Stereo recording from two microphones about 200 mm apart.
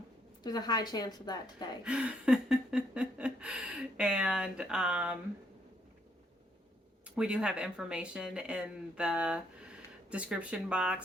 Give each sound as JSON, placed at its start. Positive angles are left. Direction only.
{"t": 0.4, "sound": "a woman's voice", "side_deg": 20}
{"t": 1.8, "sound": "a sound", "side_deg": -5}
{"t": 7.2, "sound": "speech", "side_deg": -5}